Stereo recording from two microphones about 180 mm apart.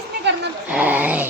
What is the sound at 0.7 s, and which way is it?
Speech, 10° right (ahead or behind).